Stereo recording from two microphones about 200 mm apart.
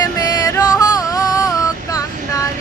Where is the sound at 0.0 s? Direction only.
15° left (ahead or behind).